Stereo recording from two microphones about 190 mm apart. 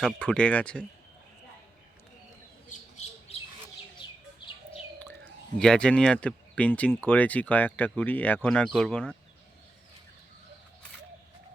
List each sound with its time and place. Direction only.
0.0 s speech: 5° left (ahead or behind)
2.6 s squawk: 35° left (ahead or behind)
5.5 s speech: 5° left (ahead or behind)